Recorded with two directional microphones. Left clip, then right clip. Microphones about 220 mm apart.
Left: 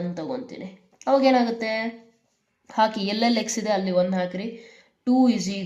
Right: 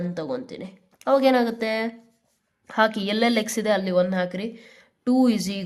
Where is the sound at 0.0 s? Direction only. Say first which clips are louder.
Right 1 dB; 45° right (ahead or behind).